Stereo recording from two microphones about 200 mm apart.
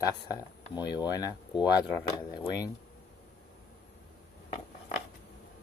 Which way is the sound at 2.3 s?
20° left (ahead or behind).